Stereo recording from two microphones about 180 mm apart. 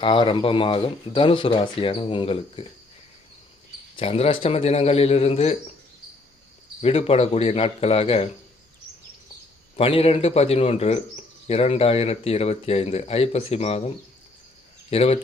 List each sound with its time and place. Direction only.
0.0 s speech: 30° left (ahead or behind)
3.9 s speech: 35° left (ahead or behind)
6.8 s speech: 35° left (ahead or behind)
9.7 s speech: 30° left (ahead or behind)